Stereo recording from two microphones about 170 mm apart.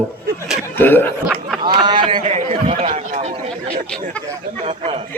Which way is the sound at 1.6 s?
25° right (ahead or behind).